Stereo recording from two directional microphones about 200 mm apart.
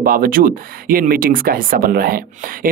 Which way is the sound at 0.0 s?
45° right (ahead or behind).